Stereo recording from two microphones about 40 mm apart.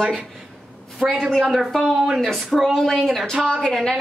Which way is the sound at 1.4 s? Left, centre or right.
Centre.